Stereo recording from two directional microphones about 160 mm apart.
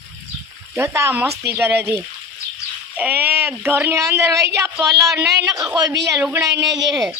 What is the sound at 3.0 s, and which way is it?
Speech, 10° right (ahead or behind).